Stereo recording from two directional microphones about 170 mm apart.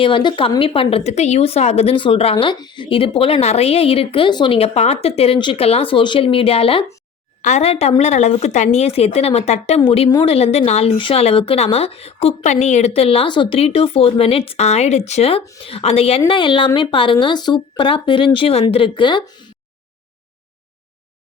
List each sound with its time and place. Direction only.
0.0 s a woman's voice: 30° left (ahead or behind)